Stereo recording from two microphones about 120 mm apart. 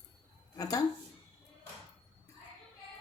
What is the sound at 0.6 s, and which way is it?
Speech, 30° left (ahead or behind).